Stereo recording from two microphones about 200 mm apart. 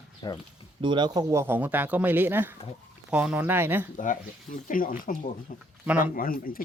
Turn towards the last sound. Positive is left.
turn(degrees=45)  # may be behind; listen again after turning